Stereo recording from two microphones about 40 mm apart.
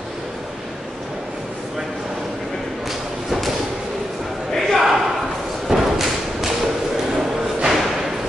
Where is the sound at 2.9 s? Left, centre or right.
Centre.